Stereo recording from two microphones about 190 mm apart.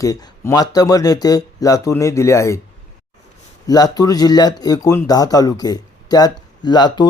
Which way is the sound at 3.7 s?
20° left (ahead or behind).